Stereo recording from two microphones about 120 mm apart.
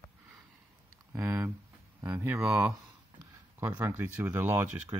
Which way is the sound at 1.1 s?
25° right (ahead or behind).